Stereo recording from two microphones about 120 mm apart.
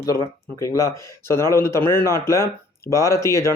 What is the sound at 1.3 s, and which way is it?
Speech, 20° left (ahead or behind).